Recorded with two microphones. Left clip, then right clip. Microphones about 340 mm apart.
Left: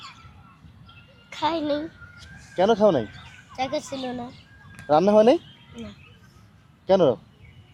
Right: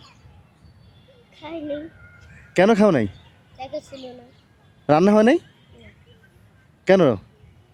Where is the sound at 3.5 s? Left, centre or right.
Left.